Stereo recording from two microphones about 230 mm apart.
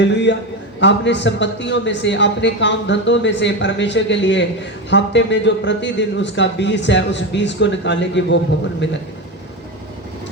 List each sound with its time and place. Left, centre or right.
0.0 s a man's voice: left